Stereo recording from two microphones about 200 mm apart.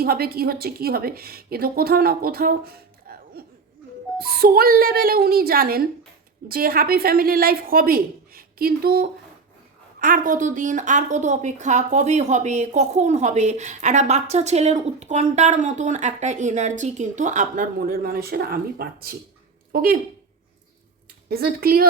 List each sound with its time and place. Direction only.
0.0 s a woman's voice: 50° right (ahead or behind)
21.2 s a woman's voice: 50° right (ahead or behind)